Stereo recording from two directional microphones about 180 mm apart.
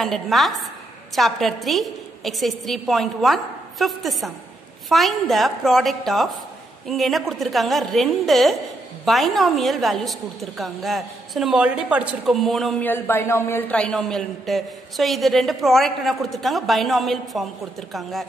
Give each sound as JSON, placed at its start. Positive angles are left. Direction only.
{"t": 0.0, "sound": "a man's voice", "side_deg": 0}